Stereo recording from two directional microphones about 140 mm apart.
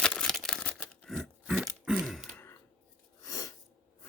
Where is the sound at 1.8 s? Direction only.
5° right (ahead or behind).